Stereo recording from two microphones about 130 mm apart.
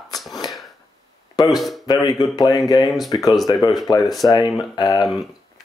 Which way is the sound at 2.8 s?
Centre (ahead or behind).